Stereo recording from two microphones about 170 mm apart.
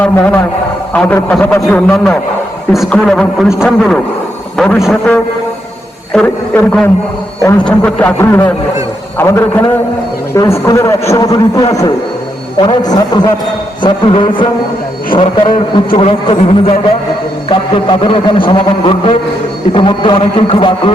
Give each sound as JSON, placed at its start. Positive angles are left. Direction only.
{"t": 0.0, "sound": "a man's voice", "side_deg": 10}
{"t": 4.5, "sound": "a man's voice", "side_deg": 5}
{"t": 6.1, "sound": "a man's voice", "side_deg": 5}